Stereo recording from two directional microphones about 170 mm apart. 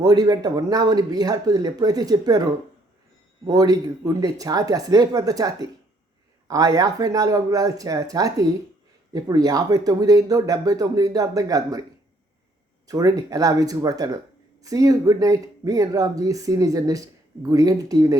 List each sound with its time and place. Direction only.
0.0 s speech: 25° right (ahead or behind)
12.9 s speech: 20° right (ahead or behind)